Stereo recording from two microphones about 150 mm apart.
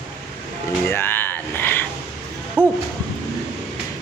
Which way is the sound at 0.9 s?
15° left (ahead or behind).